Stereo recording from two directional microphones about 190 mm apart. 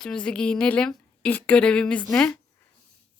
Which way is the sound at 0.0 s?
5° left (ahead or behind).